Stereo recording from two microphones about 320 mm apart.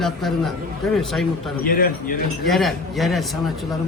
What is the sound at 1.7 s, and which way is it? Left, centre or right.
Speech, left.